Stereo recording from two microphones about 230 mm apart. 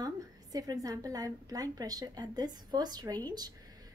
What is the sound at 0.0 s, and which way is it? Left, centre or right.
A woman's voice, centre.